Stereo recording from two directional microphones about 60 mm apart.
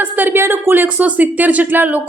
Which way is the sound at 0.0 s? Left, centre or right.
Right.